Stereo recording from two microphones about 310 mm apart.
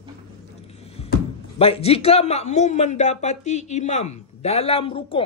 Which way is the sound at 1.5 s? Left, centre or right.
Centre.